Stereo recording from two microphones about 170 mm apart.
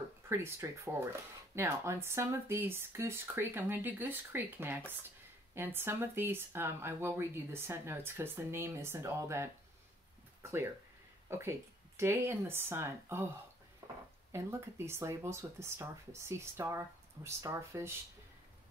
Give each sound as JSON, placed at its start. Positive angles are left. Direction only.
{"t": 0.3, "sound": "speech", "side_deg": -15}
{"t": 14.3, "sound": "speech", "side_deg": -15}